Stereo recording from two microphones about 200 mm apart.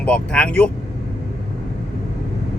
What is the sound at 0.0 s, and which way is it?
Speech, 5° left (ahead or behind).